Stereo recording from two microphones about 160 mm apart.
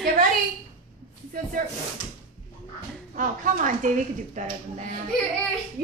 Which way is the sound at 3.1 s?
55° right (ahead or behind).